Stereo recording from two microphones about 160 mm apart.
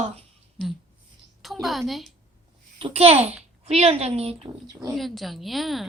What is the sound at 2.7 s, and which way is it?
A woman's voice, 35° right (ahead or behind).